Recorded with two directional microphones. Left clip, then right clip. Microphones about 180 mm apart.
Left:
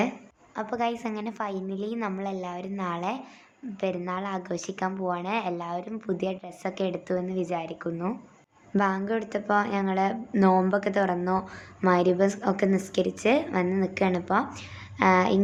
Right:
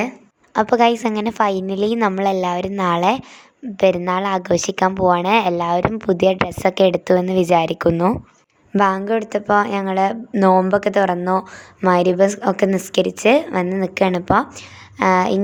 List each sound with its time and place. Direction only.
0.5 s a woman's voice: 55° right (ahead or behind)
8.7 s a woman's voice: 50° right (ahead or behind)